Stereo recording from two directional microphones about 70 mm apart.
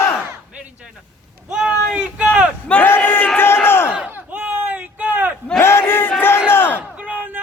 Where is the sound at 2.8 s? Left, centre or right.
Left.